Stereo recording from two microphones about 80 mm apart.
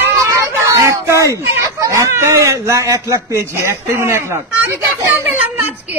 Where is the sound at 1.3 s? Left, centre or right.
Right.